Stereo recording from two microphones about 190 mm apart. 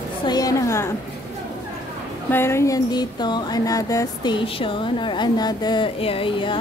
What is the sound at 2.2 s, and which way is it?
Speech, 10° left (ahead or behind).